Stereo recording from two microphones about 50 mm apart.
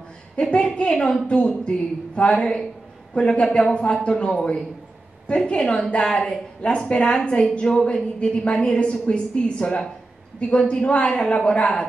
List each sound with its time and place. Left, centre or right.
0.4 s a woman's voice: centre